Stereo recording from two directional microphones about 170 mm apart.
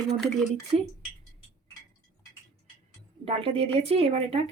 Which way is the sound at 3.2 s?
30° right (ahead or behind).